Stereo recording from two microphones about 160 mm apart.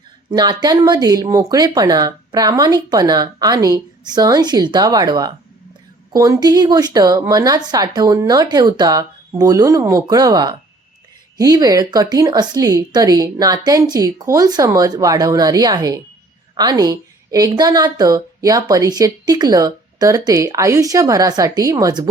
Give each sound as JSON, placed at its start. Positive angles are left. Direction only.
{"t": 0.3, "sound": "a woman's voice", "side_deg": -25}